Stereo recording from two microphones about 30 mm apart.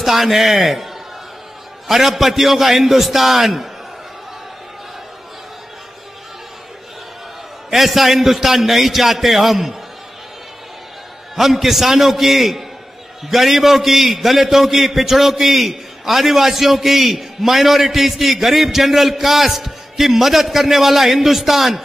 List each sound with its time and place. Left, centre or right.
0.0 s a man's voice: centre
1.9 s a man's voice: centre
7.7 s a man's voice: centre
11.3 s a man's voice: centre